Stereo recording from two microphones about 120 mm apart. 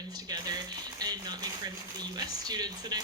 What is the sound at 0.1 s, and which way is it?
Speech, 30° right (ahead or behind).